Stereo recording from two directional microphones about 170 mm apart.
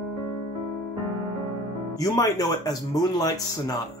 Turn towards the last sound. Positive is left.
turn(degrees=20)  # may be behind; listen again after turning